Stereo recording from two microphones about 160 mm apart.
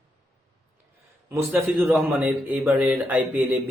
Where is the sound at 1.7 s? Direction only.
10° right (ahead or behind).